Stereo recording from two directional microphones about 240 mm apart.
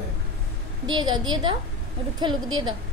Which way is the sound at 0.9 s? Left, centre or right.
Centre.